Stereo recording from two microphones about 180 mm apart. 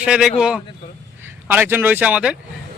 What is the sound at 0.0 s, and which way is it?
Speech, 5° right (ahead or behind).